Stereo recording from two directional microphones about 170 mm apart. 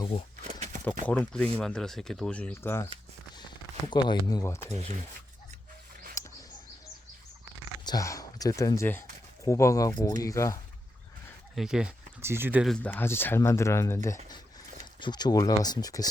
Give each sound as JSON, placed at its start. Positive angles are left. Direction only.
{"t": 0.4, "sound": "a sound", "side_deg": -45}
{"t": 1.0, "sound": "speech", "side_deg": 10}
{"t": 3.8, "sound": "speech", "side_deg": 25}
{"t": 6.2, "sound": "a sound", "side_deg": 15}
{"t": 7.9, "sound": "speech", "side_deg": 20}
{"t": 11.5, "sound": "speech", "side_deg": -5}
{"t": 12.6, "sound": "speech", "side_deg": 5}